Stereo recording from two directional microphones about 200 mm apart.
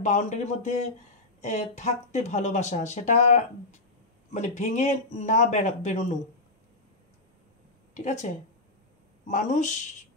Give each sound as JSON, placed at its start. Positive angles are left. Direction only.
{"t": 0.0, "sound": "speech", "side_deg": 35}
{"t": 7.9, "sound": "speech", "side_deg": 40}
{"t": 9.3, "sound": "speech", "side_deg": 40}